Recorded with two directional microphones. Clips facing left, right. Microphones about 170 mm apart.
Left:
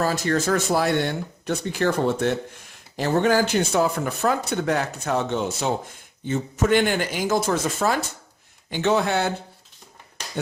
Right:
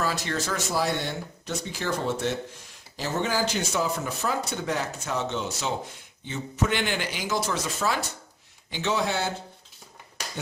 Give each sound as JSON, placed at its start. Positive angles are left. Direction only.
{"t": 0.0, "sound": "speech", "side_deg": 45}